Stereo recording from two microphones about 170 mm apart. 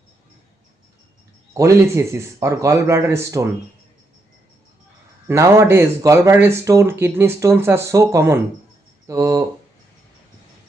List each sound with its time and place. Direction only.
1.5 s speech: 15° right (ahead or behind)
5.3 s speech: 15° right (ahead or behind)